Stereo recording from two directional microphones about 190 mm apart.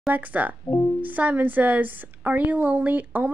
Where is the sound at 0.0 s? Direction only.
10° right (ahead or behind).